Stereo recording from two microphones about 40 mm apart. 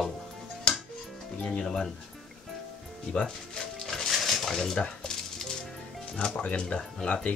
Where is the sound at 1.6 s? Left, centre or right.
Centre.